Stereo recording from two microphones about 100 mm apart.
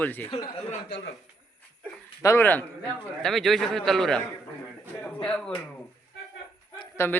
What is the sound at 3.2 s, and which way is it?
A man's voice, 5° left (ahead or behind).